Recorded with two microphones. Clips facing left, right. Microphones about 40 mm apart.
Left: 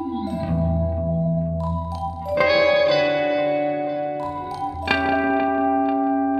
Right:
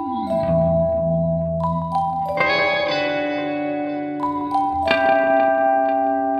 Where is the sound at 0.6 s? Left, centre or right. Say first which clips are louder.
Right 7 dB; right.